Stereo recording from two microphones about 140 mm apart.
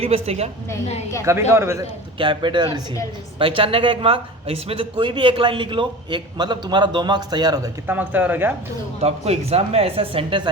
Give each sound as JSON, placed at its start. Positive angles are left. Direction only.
{"t": 0.0, "sound": "speech", "side_deg": -45}
{"t": 1.2, "sound": "speech", "side_deg": -20}
{"t": 2.1, "sound": "speech", "side_deg": -35}
{"t": 7.9, "sound": "speech", "side_deg": -10}
{"t": 9.0, "sound": "speech", "side_deg": -50}